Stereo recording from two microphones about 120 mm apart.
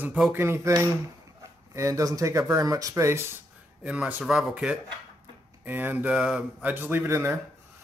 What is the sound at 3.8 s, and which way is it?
Speech, 10° right (ahead or behind).